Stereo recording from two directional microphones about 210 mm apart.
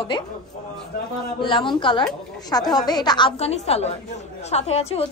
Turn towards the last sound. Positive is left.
turn(degrees=30)  # may be behind; listen again after turning